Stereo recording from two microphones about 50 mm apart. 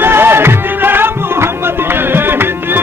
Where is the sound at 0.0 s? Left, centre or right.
Right.